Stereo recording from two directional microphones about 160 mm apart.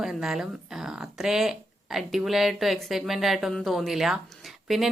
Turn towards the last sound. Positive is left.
turn(degrees=0)  # may be behind; listen again after turning